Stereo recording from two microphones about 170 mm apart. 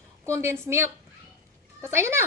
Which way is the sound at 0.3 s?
15° right (ahead or behind).